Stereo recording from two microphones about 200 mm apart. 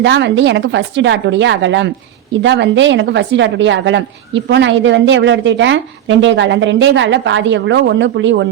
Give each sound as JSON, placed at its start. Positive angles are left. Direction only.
{"t": 0.0, "sound": "speech", "side_deg": -60}